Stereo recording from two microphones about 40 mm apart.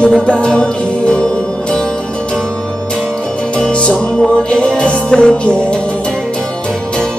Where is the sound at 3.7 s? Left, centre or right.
Left.